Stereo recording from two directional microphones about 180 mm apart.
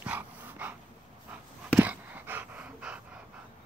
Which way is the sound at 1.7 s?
10° right (ahead or behind).